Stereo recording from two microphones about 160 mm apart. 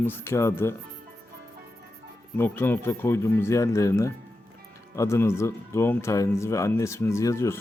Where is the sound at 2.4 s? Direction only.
15° left (ahead or behind).